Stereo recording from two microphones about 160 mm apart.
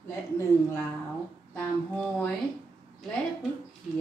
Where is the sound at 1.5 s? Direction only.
5° left (ahead or behind).